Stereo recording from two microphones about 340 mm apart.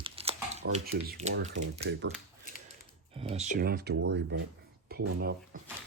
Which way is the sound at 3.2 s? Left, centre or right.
Centre.